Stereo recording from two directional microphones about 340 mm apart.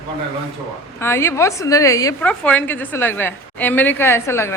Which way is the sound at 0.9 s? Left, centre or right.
Centre.